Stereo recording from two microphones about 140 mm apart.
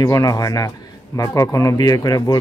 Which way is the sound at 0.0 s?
25° left (ahead or behind).